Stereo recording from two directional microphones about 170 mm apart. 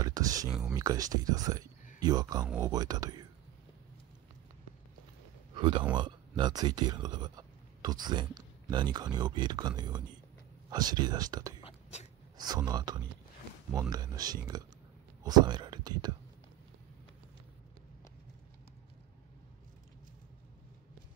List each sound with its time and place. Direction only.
0.0 s a sound: 20° right (ahead or behind)
0.5 s speech: 5° right (ahead or behind)
0.7 s speech: 20° right (ahead or behind)
5.6 s speech: 30° right (ahead or behind)
11.6 s writing: 40° left (ahead or behind)
12.4 s speech: 25° right (ahead or behind)